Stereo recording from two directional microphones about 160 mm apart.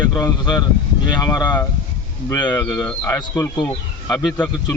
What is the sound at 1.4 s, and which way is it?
Speech, 10° left (ahead or behind).